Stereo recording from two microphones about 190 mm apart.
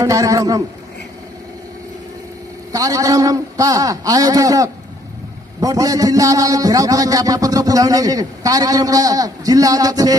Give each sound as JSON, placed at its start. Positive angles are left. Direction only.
{"t": 0.0, "sound": "a man's voice", "side_deg": -15}
{"t": 2.7, "sound": "a man's voice", "side_deg": -15}